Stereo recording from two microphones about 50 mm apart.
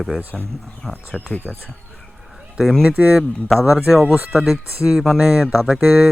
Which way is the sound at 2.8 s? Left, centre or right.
Right.